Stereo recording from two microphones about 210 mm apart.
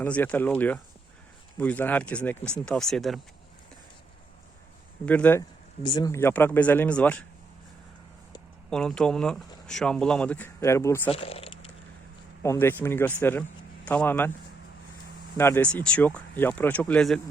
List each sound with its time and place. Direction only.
0.0 s speech: 5° left (ahead or behind)
5.0 s speech: 5° left (ahead or behind)
5.8 s speech: 20° left (ahead or behind)
8.7 s speech: 5° left (ahead or behind)
11.1 s speech: 25° left (ahead or behind)
12.4 s speech: 10° left (ahead or behind)
15.4 s speech: 10° left (ahead or behind)